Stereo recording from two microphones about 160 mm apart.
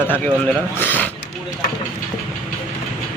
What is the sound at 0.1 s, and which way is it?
Speech, 10° left (ahead or behind).